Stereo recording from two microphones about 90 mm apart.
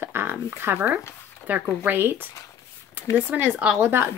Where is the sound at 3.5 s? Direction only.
20° right (ahead or behind).